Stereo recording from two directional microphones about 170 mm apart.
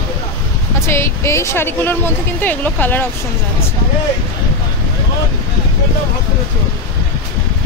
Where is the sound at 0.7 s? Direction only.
15° left (ahead or behind).